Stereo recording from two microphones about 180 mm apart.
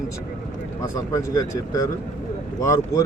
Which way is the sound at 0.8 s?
20° left (ahead or behind).